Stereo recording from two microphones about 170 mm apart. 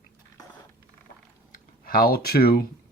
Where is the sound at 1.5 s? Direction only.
60° left (ahead or behind).